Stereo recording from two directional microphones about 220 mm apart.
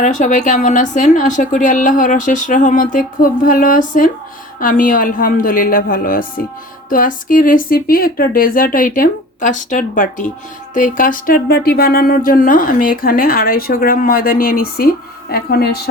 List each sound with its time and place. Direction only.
0.0 s speech: 35° left (ahead or behind)